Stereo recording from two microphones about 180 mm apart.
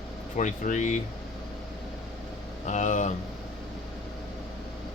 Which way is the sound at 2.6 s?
40° left (ahead or behind).